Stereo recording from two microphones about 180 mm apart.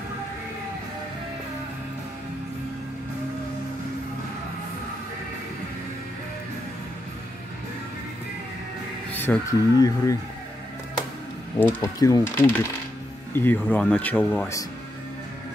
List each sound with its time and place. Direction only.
9.1 s speech: 10° left (ahead or behind)
11.6 s speech: 20° left (ahead or behind)